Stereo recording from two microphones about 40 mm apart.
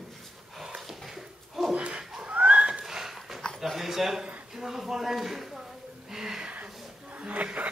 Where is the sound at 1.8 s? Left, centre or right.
Right.